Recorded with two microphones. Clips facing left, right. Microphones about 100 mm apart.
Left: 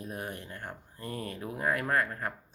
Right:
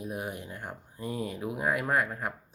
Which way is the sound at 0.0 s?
10° right (ahead or behind).